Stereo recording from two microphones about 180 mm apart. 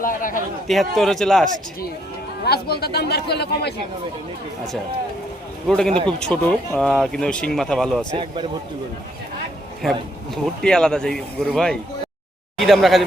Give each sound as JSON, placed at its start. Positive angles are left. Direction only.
{"t": 0.0, "sound": "a man's voice", "side_deg": 50}
{"t": 0.7, "sound": "speech", "side_deg": 0}
{"t": 2.4, "sound": "speech", "side_deg": 60}
{"t": 5.6, "sound": "speech", "side_deg": 5}
{"t": 8.1, "sound": "speech", "side_deg": -25}
{"t": 10.3, "sound": "speech", "side_deg": 5}